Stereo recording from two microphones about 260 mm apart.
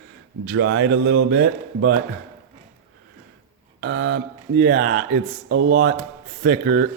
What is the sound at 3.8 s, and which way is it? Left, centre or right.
Mantra, right.